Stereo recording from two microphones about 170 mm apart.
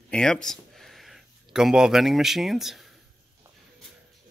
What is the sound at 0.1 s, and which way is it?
Speech, 5° left (ahead or behind).